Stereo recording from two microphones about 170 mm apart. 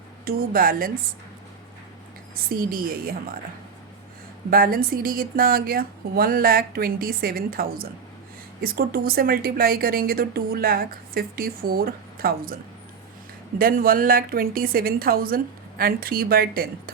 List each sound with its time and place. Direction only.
0.3 s a woman's voice: 60° right (ahead or behind)
2.3 s a woman's voice: 60° right (ahead or behind)
4.4 s a woman's voice: 55° right (ahead or behind)
13.6 s a woman's voice: 60° right (ahead or behind)